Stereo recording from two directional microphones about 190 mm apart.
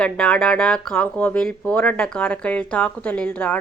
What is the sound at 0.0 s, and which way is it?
A woman's voice, 5° left (ahead or behind).